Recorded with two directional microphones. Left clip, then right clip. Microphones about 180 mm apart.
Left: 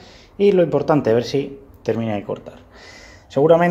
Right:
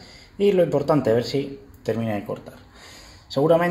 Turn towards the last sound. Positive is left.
turn(degrees=20)  # may be behind; listen again after turning